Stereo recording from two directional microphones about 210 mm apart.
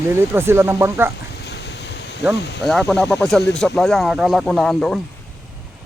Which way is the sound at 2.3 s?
55° left (ahead or behind).